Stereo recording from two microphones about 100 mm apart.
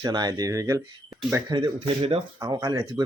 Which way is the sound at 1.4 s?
45° right (ahead or behind).